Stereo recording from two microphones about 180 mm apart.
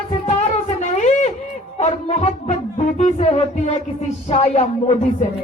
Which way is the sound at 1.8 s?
40° left (ahead or behind).